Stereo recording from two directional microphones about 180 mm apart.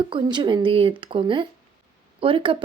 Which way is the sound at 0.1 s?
25° right (ahead or behind).